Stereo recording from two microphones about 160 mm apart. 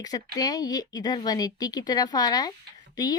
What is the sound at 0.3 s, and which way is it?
Speech, 25° left (ahead or behind).